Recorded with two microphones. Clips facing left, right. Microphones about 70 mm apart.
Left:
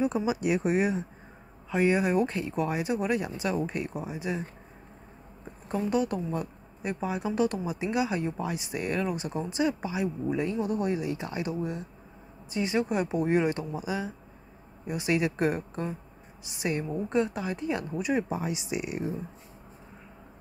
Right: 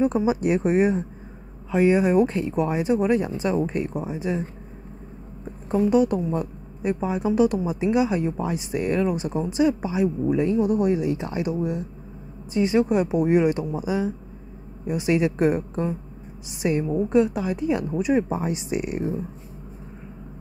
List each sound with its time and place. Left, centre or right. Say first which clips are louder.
0.0 s speech: right 6 dB; right
1.7 s speech: right 6 dB; centre
5.9 s speech: right 7 dB; right
17.1 s a woman's voice: right 7 dB; centre
18.3 s speech: right 5 dB; right